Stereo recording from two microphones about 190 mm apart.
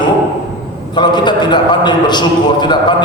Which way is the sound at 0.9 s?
25° left (ahead or behind).